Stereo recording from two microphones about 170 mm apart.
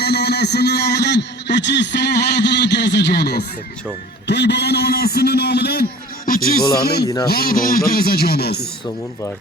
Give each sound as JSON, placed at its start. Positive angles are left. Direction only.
{"t": 0.0, "sound": "a man's voice", "side_deg": 70}
{"t": 4.3, "sound": "a man's voice", "side_deg": 90}